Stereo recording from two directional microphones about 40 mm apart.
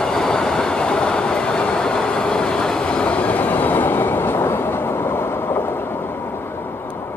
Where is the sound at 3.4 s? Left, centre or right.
Left.